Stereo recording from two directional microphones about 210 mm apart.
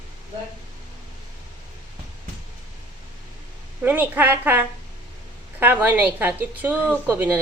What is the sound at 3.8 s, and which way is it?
A woman's voice, 10° right (ahead or behind).